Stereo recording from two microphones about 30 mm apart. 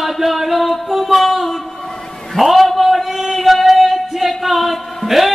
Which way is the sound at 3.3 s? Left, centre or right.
Centre.